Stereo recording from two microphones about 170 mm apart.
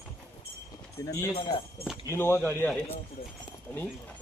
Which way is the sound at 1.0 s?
20° left (ahead or behind).